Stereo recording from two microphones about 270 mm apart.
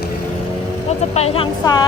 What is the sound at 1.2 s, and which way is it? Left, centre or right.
Vehicle, left.